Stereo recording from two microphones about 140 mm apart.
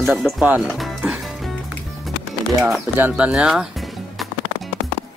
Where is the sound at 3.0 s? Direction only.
10° right (ahead or behind).